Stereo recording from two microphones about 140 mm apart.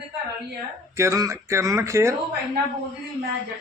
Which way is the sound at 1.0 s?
20° right (ahead or behind).